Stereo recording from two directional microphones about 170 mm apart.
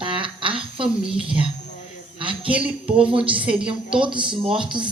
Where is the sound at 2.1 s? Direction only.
30° right (ahead or behind).